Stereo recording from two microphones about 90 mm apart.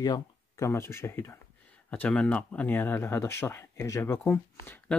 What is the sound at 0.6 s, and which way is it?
Speech, 30° left (ahead or behind).